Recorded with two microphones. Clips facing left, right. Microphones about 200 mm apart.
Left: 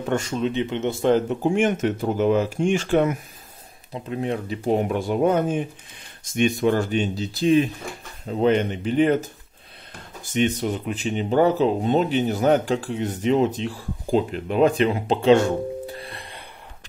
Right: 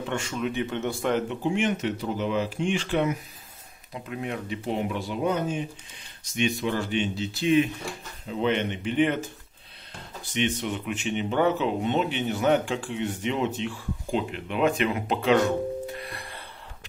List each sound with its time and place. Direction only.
0.0 s speech: 40° left (ahead or behind); by 0.9 s 20° left (ahead or behind)
1.0 s speech: 35° left (ahead or behind)
3.9 s speech: 30° left (ahead or behind)
10.3 s speech: 40° left (ahead or behind); by 16.4 s 20° left (ahead or behind)